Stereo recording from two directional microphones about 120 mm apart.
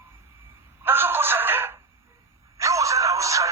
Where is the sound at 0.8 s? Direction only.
20° right (ahead or behind).